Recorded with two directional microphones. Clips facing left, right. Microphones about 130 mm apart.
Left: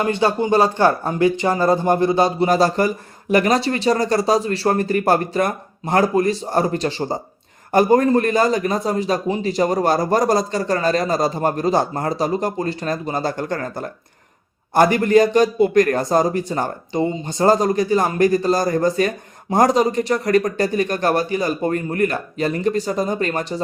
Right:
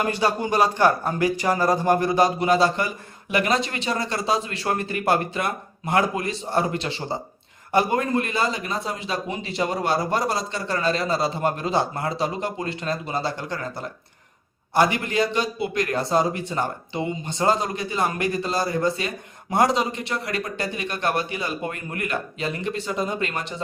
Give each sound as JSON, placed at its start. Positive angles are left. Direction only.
{"t": 0.0, "sound": "speech", "side_deg": 25}
{"t": 2.5, "sound": "a man's voice", "side_deg": 40}